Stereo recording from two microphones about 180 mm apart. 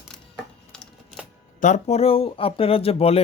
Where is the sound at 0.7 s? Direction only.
5° left (ahead or behind).